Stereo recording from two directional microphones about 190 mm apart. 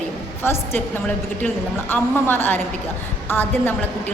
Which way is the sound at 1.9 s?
10° left (ahead or behind).